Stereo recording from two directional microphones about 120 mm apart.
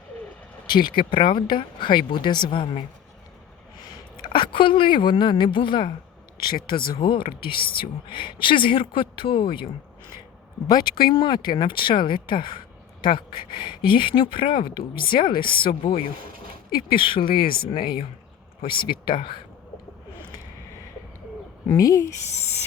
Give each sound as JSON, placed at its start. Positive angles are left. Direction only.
{"t": 0.7, "sound": "speech", "side_deg": 40}
{"t": 4.2, "sound": "a woman's voice", "side_deg": 40}
{"t": 10.7, "sound": "speech", "side_deg": 35}
{"t": 16.9, "sound": "speech", "side_deg": 45}
{"t": 21.7, "sound": "speech", "side_deg": 30}
{"t": 22.2, "sound": "speech", "side_deg": 70}